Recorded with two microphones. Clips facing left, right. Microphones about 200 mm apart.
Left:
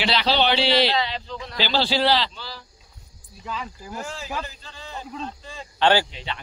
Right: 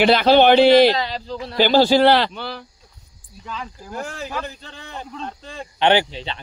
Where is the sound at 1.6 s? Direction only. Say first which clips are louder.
Right 9 dB; 50° right (ahead or behind).